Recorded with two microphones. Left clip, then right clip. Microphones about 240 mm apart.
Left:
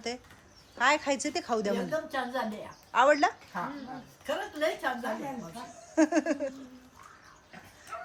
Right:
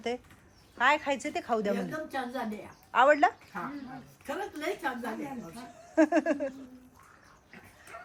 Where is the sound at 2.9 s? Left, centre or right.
Centre.